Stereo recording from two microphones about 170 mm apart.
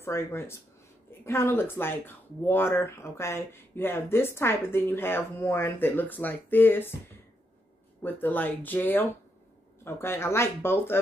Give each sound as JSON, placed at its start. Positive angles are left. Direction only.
{"t": 0.0, "sound": "speech", "side_deg": 15}
{"t": 8.0, "sound": "speech", "side_deg": 10}